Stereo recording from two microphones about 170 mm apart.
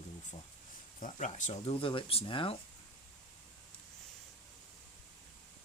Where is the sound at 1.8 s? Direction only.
30° left (ahead or behind).